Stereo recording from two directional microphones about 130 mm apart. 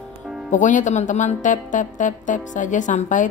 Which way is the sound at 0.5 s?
75° left (ahead or behind).